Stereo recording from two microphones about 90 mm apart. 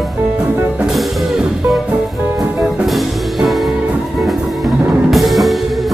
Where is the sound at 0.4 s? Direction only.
20° right (ahead or behind).